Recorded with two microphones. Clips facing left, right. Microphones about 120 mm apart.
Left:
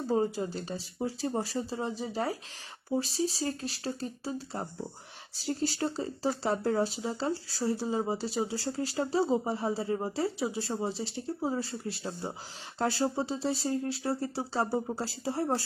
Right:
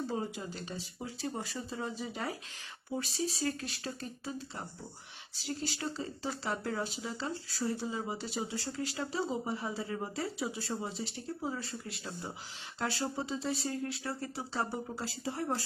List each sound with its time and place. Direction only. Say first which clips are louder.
0.1 s speech: left 8 dB; 35° left (ahead or behind)